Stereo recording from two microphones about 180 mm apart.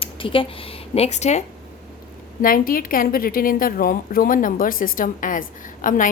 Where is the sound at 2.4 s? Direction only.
50° left (ahead or behind).